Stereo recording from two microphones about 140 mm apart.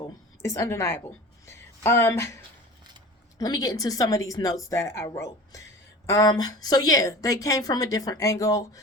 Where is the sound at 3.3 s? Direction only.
25° left (ahead or behind).